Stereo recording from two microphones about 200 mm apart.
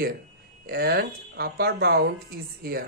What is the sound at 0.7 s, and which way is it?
Speech, 55° right (ahead or behind).